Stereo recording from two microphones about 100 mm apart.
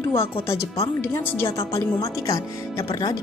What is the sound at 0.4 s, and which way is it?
Speech, 75° left (ahead or behind).